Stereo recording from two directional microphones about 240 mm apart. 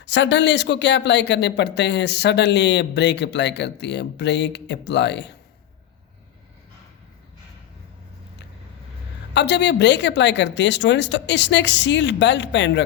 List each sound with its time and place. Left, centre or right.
0.0 s speech: left
9.3 s speech: left